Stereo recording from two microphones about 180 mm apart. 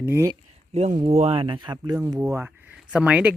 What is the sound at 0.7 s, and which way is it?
Speech, 40° right (ahead or behind).